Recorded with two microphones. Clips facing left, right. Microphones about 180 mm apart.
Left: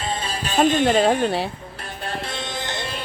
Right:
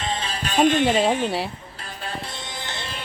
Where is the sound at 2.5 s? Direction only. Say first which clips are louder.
Left 5 dB; 20° left (ahead or behind).